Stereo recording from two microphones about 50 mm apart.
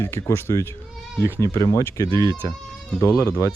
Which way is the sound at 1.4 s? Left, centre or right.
Left.